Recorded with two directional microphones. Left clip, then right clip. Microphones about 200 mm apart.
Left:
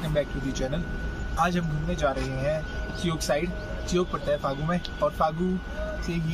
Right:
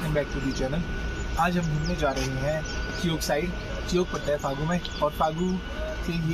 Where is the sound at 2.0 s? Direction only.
15° left (ahead or behind).